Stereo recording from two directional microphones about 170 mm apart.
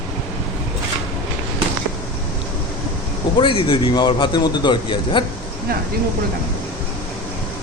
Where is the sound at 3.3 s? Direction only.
30° left (ahead or behind).